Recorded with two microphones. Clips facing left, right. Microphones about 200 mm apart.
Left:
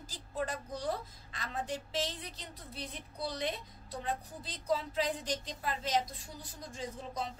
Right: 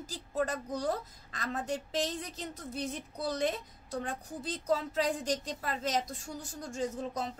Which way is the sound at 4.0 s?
45° right (ahead or behind).